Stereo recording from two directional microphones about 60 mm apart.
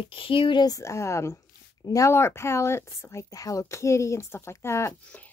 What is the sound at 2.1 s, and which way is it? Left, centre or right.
A woman's voice, left.